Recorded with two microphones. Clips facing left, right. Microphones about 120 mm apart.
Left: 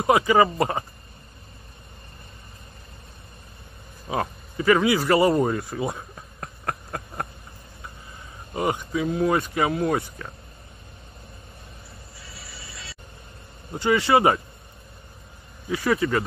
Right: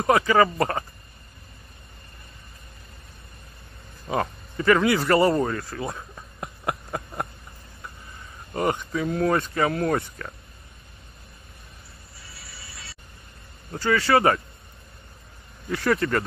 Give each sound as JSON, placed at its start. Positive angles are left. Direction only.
{"t": 0.0, "sound": "speech", "side_deg": 15}
{"t": 4.1, "sound": "speech", "side_deg": 5}
{"t": 5.5, "sound": "speech", "side_deg": 20}
{"t": 6.4, "sound": "a sound", "side_deg": -5}
{"t": 8.5, "sound": "speech", "side_deg": 5}
{"t": 13.7, "sound": "speech", "side_deg": 20}
{"t": 15.7, "sound": "speech", "side_deg": 5}